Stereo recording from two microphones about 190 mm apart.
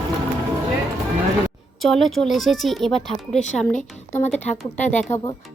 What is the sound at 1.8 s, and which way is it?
Speech, centre (ahead or behind).